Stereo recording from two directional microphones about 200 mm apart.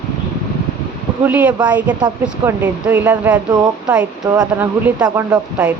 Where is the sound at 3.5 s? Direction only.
20° right (ahead or behind).